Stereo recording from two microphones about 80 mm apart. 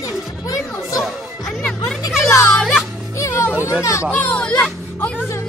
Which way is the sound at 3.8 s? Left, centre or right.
Left.